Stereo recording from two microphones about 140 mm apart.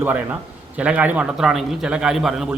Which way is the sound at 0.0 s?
10° right (ahead or behind).